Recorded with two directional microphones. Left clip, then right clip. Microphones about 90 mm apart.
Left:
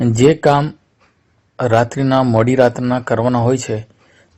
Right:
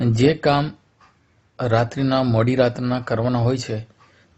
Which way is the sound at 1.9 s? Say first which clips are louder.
Left 6 dB; 30° left (ahead or behind).